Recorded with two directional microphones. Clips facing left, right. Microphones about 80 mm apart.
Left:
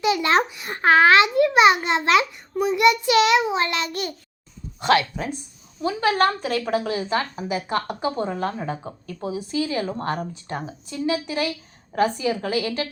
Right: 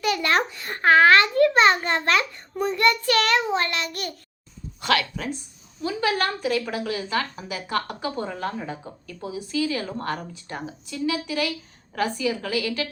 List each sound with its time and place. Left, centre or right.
0.0 s a child's voice: centre